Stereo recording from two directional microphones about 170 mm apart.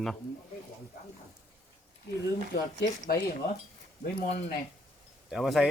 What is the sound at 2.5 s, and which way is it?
Speech, 70° left (ahead or behind).